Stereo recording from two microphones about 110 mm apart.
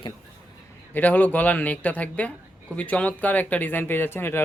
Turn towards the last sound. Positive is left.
turn(degrees=20)  # may be behind; listen again after turning